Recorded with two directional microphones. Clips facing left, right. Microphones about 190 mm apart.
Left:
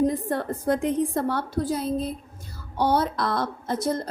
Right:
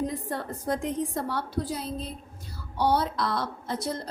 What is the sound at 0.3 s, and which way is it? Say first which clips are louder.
A woman's voice: left 6 dB; 55° left (ahead or behind).